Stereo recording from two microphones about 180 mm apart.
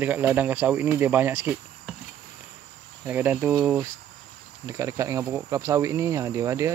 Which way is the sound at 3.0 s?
10° right (ahead or behind).